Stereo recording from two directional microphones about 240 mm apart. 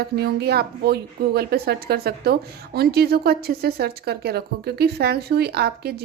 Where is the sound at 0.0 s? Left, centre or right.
Right.